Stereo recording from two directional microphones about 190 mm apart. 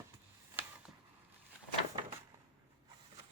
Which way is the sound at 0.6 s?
10° right (ahead or behind).